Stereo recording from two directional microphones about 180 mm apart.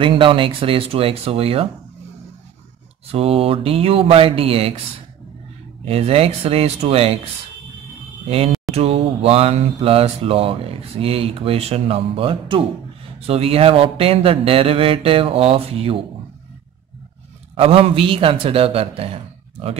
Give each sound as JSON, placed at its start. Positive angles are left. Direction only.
{"t": 0.0, "sound": "speech", "side_deg": -30}
{"t": 3.1, "sound": "speech", "side_deg": -30}
{"t": 5.9, "sound": "speech", "side_deg": -35}
{"t": 8.7, "sound": "speech", "side_deg": -35}
{"t": 17.6, "sound": "speech", "side_deg": -30}